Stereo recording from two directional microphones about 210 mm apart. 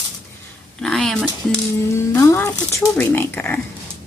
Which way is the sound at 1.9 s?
15° left (ahead or behind).